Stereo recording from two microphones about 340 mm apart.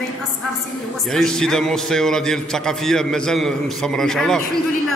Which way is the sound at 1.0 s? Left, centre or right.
Centre.